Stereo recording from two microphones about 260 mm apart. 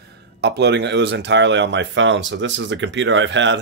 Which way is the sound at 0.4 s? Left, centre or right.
Right.